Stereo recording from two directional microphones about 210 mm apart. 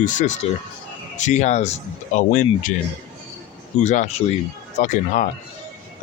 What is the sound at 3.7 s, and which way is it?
Speech, 35° left (ahead or behind).